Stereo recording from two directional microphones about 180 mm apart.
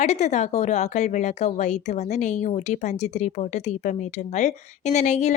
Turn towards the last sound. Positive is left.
turn(degrees=40)  # may be behind; listen again after turning